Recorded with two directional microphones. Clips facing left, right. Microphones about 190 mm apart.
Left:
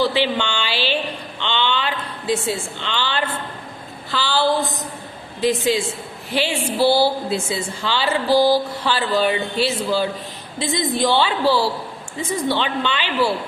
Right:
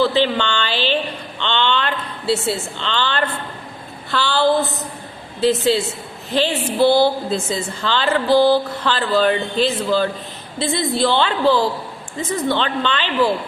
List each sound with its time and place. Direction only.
0.0 s a woman's voice: 10° left (ahead or behind)